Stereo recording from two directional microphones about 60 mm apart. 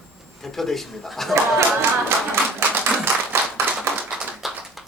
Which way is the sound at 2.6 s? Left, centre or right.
Right.